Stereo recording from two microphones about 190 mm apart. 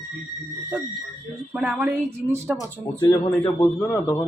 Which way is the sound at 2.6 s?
20° left (ahead or behind).